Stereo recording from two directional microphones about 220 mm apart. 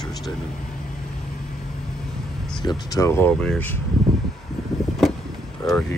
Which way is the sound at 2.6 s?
15° left (ahead or behind).